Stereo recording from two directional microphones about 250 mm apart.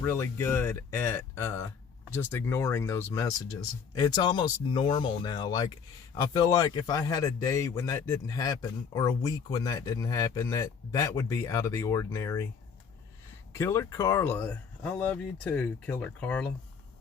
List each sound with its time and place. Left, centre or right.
0.0 s a man's voice: centre
13.5 s a man's voice: centre